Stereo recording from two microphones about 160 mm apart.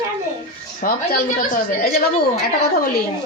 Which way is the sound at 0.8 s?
60° left (ahead or behind).